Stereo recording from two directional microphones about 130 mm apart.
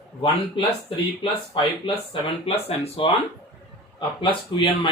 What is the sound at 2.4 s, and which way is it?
Speech, 50° left (ahead or behind).